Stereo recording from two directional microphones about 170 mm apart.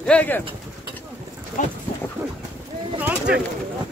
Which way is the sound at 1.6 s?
45° left (ahead or behind).